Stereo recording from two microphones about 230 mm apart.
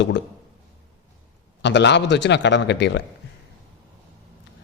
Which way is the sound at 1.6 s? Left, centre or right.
Left.